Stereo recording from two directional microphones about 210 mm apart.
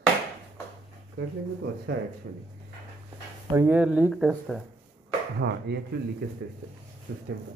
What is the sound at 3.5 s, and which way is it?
Speech, 10° right (ahead or behind).